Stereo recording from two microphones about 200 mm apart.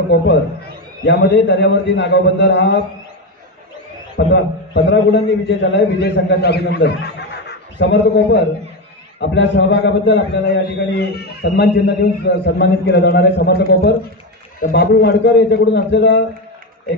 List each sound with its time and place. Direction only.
0.1 s a man's voice: 65° left (ahead or behind)
4.3 s a man's voice: 65° left (ahead or behind)